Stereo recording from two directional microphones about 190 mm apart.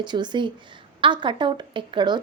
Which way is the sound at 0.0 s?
25° right (ahead or behind).